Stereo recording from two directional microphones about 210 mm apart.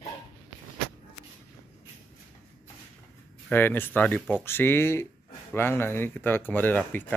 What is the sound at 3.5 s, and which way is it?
Speech, 10° left (ahead or behind).